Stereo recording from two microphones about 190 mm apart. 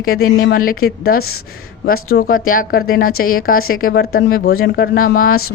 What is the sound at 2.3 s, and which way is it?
Speech, 45° left (ahead or behind).